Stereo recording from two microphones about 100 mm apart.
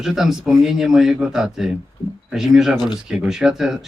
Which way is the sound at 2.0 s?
50° left (ahead or behind).